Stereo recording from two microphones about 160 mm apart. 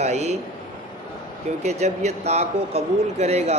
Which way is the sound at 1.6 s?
45° right (ahead or behind).